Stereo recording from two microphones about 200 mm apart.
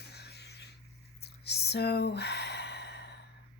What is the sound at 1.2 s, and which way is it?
Sigh, 55° left (ahead or behind).